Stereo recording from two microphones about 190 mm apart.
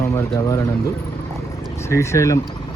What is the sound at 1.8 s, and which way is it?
Speech, 15° left (ahead or behind).